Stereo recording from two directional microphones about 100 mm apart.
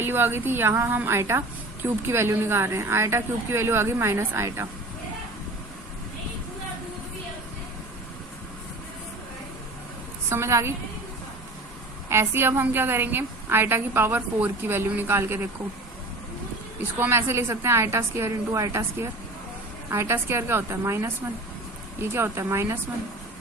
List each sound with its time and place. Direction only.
0.0 s a woman's voice: 20° right (ahead or behind)
10.2 s a woman's voice: 30° right (ahead or behind)
12.0 s a woman's voice: 25° right (ahead or behind)
17.0 s a woman's voice: 25° right (ahead or behind)
22.1 s a woman's voice: 25° right (ahead or behind)